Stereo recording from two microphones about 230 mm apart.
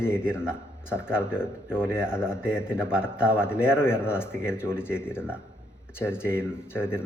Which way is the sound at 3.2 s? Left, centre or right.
Centre.